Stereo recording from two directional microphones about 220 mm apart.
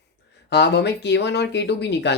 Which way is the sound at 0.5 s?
50° left (ahead or behind).